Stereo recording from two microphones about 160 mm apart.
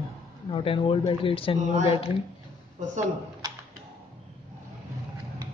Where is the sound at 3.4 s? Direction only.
25° right (ahead or behind).